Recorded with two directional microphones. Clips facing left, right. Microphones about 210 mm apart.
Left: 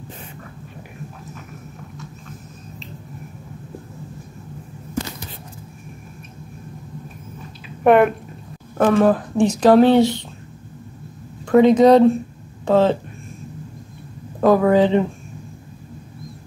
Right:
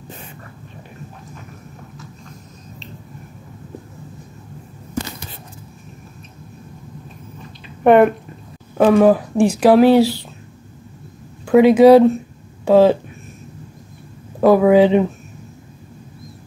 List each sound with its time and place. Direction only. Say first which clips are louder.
7.6 s a sound: right 2 dB; centre (ahead or behind)
8.7 s speech: right 3 dB; 20° right (ahead or behind)
9.0 s speech: right 3 dB; 10° right (ahead or behind)
11.4 s speech: right 3 dB; 5° right (ahead or behind)
14.4 s speech: right 3 dB; 10° right (ahead or behind)